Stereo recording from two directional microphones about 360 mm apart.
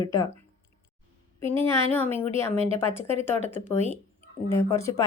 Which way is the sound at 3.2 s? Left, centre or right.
Centre.